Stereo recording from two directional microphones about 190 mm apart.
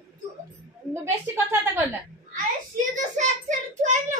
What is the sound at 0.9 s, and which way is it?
Speech, 15° right (ahead or behind).